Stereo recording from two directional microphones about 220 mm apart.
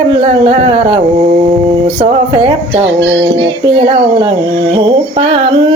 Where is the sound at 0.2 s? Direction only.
25° right (ahead or behind).